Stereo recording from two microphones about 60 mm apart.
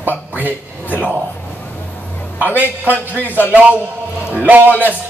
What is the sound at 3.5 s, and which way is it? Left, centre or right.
Speech, right.